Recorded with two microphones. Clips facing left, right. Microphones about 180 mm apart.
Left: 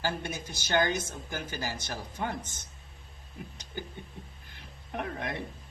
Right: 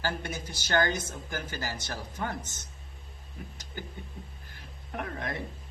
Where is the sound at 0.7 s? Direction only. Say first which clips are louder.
Even; 15° left (ahead or behind).